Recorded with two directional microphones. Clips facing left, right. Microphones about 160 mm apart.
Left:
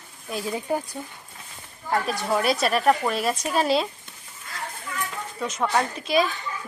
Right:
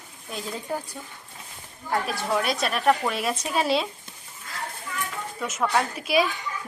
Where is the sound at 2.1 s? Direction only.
Centre (ahead or behind).